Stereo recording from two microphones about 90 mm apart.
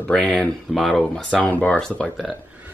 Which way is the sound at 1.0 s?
10° left (ahead or behind).